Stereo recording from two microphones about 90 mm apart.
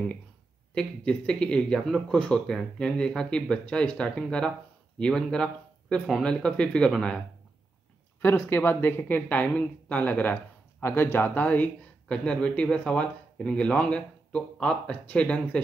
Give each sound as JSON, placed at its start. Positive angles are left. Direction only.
{"t": 0.7, "sound": "speech", "side_deg": 10}
{"t": 8.4, "sound": "speech", "side_deg": 25}